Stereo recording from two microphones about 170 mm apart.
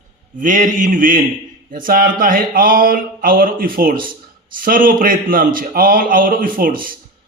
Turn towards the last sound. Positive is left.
turn(degrees=-55)  # may be behind; listen again after turning